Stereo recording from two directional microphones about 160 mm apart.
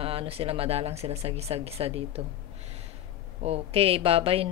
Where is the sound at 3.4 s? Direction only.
40° right (ahead or behind).